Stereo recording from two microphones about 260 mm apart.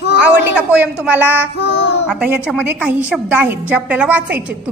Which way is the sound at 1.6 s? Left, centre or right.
Left.